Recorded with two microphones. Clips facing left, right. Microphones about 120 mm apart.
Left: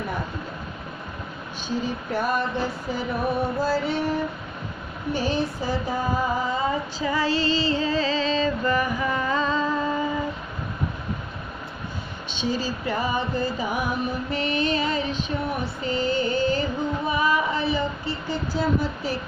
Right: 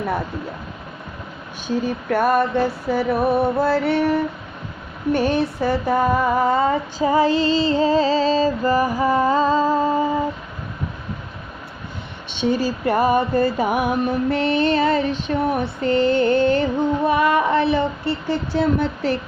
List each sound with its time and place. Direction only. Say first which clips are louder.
1.6 s music: right 6 dB; 60° right (ahead or behind)
7.0 s music: right 7 dB; 45° right (ahead or behind)
12.4 s music: right 7 dB; 60° right (ahead or behind)